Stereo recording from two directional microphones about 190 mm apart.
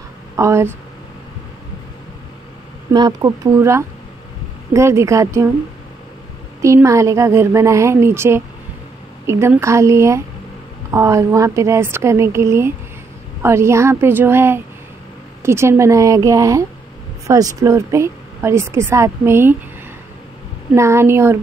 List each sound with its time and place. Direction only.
0.4 s a woman's voice: 15° right (ahead or behind)
2.9 s a woman's voice: 20° right (ahead or behind)
6.6 s a woman's voice: 15° right (ahead or behind)
20.7 s a woman's voice: 15° right (ahead or behind)